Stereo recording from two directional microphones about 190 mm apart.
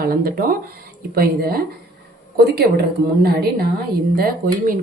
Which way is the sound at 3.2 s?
55° right (ahead or behind).